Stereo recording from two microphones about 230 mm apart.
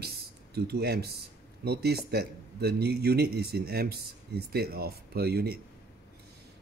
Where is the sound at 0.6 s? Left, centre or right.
Right.